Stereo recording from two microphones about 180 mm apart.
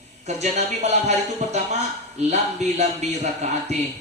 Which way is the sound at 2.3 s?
40° right (ahead or behind).